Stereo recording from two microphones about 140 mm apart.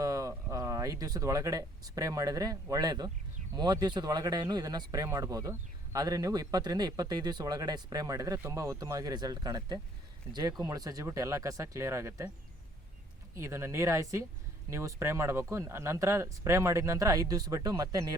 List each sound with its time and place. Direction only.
0.0 s speech: 25° right (ahead or behind)
13.3 s speech: 20° right (ahead or behind)